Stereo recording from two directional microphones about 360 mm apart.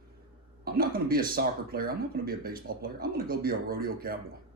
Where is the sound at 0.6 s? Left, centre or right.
Right.